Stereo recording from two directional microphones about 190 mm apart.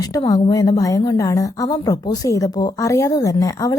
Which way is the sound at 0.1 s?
20° left (ahead or behind).